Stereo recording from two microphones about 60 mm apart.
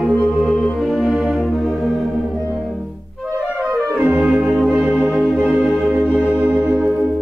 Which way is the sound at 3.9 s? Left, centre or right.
Right.